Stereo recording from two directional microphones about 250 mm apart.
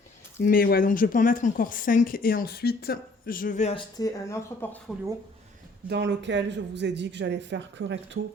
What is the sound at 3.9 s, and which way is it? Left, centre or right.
Speech, centre.